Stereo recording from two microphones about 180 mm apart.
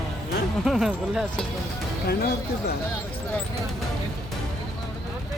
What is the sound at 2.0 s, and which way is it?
Speech, 60° left (ahead or behind).